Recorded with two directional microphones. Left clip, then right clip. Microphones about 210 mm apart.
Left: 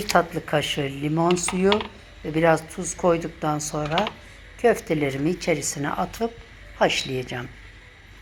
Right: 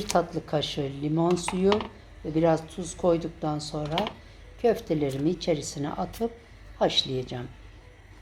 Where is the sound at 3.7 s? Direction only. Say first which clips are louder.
Left 5 dB; 25° left (ahead or behind).